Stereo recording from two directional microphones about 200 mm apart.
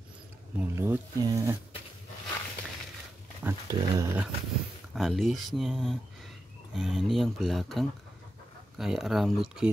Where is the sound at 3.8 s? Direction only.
15° right (ahead or behind).